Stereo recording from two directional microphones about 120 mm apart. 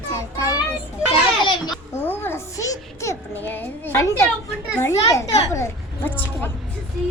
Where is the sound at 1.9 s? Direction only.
20° left (ahead or behind).